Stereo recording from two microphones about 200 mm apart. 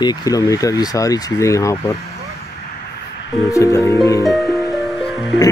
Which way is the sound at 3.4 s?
15° left (ahead or behind).